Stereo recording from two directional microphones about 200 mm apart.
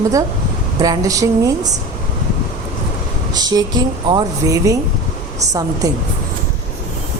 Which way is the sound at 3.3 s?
20° right (ahead or behind).